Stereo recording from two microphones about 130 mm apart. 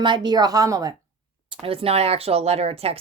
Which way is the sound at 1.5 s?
45° right (ahead or behind).